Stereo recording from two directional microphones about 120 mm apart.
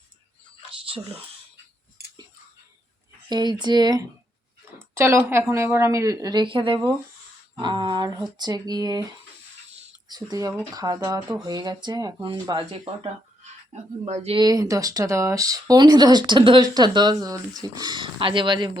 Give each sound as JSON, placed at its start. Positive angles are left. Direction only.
{"t": 0.7, "sound": "whispering", "side_deg": -50}
{"t": 3.2, "sound": "speech", "side_deg": -35}
{"t": 4.9, "sound": "speech", "side_deg": -20}
{"t": 10.1, "sound": "speech", "side_deg": -35}
{"t": 13.7, "sound": "speech", "side_deg": -80}
{"t": 14.3, "sound": "speech", "side_deg": -30}